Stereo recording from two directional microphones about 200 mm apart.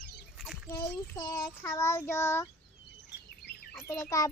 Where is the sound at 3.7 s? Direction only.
15° left (ahead or behind).